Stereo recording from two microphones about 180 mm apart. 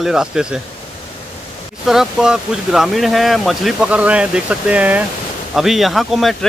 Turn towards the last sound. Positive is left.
turn(degrees=0)  # may be behind; listen again after turning